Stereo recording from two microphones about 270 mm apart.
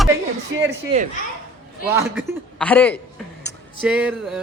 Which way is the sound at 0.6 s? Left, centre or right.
Centre.